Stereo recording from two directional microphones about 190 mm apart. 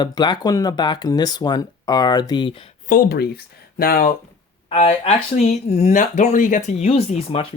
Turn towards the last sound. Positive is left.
turn(degrees=30)  # may be behind; listen again after turning